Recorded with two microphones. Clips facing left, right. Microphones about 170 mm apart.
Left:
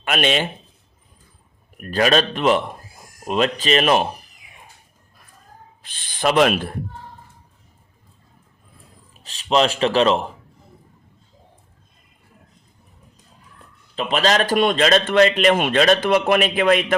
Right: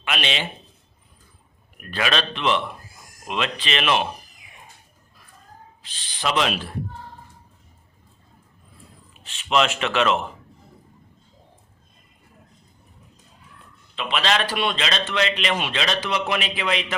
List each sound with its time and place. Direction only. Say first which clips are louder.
0.0 s speech: left 7 dB; 45° left (ahead or behind)
1.8 s a man's voice: left 7 dB; 40° left (ahead or behind)
5.8 s speech: left 6 dB; 50° left (ahead or behind)
9.1 s a man's voice: left 3 dB; 35° left (ahead or behind)
13.9 s a man's voice: left 4 dB; 40° left (ahead or behind)